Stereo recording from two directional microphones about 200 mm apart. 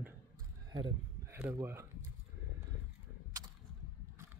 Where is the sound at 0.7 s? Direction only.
20° right (ahead or behind).